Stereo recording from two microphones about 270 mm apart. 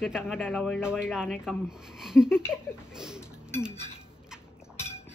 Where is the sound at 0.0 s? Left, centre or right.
Centre.